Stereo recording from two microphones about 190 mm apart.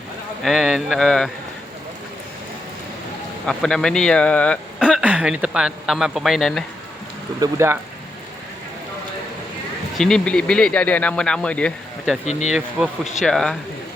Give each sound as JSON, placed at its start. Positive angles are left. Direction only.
{"t": 0.4, "sound": "speech", "side_deg": 0}
{"t": 3.4, "sound": "speech", "side_deg": 5}
{"t": 4.8, "sound": "speech", "side_deg": -5}
{"t": 7.3, "sound": "speech", "side_deg": -15}
{"t": 10.0, "sound": "speech", "side_deg": 5}
{"t": 12.2, "sound": "speech", "side_deg": 35}
{"t": 13.2, "sound": "speech", "side_deg": 0}